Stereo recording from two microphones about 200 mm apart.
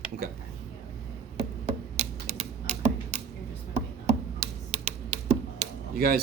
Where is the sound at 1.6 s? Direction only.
35° right (ahead or behind).